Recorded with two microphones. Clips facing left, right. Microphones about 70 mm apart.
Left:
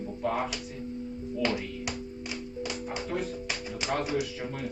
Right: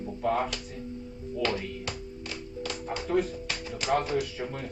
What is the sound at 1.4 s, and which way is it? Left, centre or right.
Music, centre.